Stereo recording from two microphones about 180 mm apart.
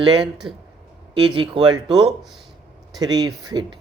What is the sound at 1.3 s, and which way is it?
Speech, 25° right (ahead or behind).